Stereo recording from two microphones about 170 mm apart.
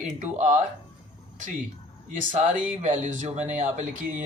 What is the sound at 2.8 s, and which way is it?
Speech, 45° right (ahead or behind).